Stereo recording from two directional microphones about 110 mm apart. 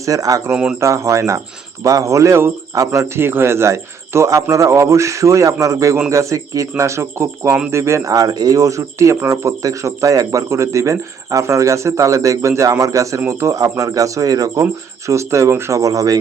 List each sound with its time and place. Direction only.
0.0 s speech: 30° right (ahead or behind)
0.5 s speech: 10° right (ahead or behind)
0.8 s speech: 25° right (ahead or behind)